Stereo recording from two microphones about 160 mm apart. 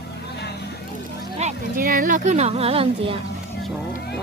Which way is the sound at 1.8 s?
65° right (ahead or behind).